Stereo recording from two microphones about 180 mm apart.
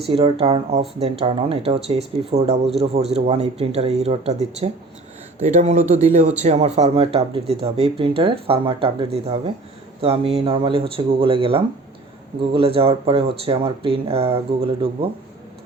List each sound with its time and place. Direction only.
0.0 s speech: 30° right (ahead or behind)